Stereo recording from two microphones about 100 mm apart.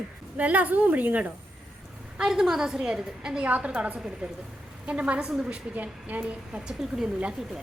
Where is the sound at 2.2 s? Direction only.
5° right (ahead or behind).